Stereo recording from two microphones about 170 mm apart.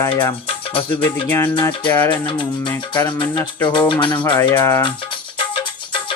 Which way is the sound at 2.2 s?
25° left (ahead or behind).